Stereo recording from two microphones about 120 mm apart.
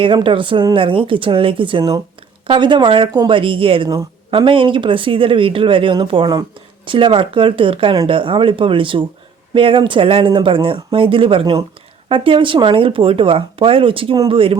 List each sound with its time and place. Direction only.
0.0 s speech: 45° right (ahead or behind)